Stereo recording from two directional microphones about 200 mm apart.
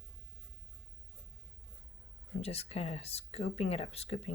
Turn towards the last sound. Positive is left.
turn(degrees=30)  # may be behind; listen again after turning